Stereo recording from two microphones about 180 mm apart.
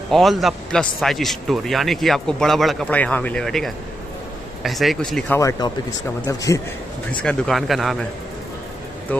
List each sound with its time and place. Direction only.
0.1 s a man's voice: centre (ahead or behind)
5.4 s a man's voice: 15° left (ahead or behind)
7.1 s a man's voice: 5° left (ahead or behind)
9.1 s a man's voice: 10° left (ahead or behind)